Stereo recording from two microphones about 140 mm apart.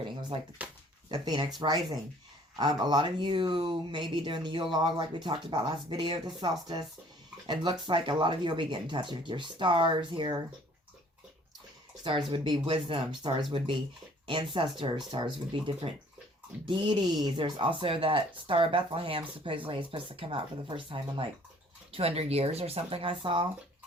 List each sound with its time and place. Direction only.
0.0 s a sound: 35° right (ahead or behind)
0.6 s speech: 10° right (ahead or behind)
1.1 s speech: 30° right (ahead or behind)
12.3 s speech: 35° right (ahead or behind)